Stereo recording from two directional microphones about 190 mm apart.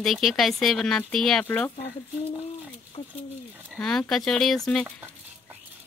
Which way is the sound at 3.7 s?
5° left (ahead or behind).